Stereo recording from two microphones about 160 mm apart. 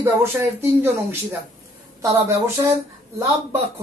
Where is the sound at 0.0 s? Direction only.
15° right (ahead or behind).